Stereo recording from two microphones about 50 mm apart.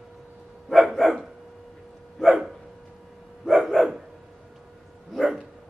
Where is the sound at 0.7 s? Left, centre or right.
Centre.